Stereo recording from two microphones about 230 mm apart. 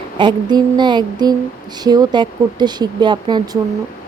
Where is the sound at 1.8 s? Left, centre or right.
Centre.